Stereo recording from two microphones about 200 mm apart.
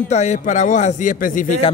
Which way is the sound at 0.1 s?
35° left (ahead or behind).